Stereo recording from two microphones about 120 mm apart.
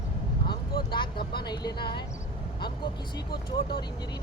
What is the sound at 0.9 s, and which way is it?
Speech, 40° left (ahead or behind).